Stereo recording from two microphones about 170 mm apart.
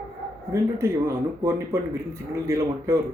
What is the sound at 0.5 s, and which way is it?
Speech, 15° right (ahead or behind).